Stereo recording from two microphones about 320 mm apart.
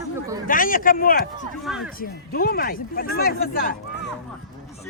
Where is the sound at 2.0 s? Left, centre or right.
Left.